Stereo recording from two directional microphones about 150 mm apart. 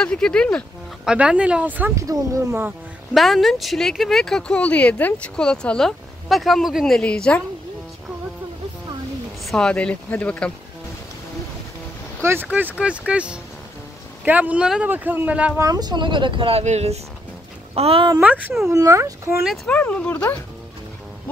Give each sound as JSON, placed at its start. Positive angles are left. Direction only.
{"t": 0.0, "sound": "speech", "side_deg": 5}
{"t": 1.0, "sound": "speech", "side_deg": -5}
{"t": 3.2, "sound": "speech", "side_deg": 0}
{"t": 9.4, "sound": "speech", "side_deg": 5}
{"t": 12.2, "sound": "speech", "side_deg": -15}
{"t": 15.6, "sound": "a woman's voice", "side_deg": -25}
{"t": 18.2, "sound": "speech", "side_deg": -10}
{"t": 18.7, "sound": "speech", "side_deg": -20}
{"t": 19.4, "sound": "speech", "side_deg": 0}